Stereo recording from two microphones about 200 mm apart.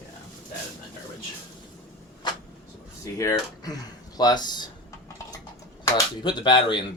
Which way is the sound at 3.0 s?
15° left (ahead or behind).